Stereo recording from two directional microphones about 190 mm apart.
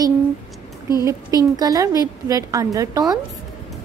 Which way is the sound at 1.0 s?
15° right (ahead or behind).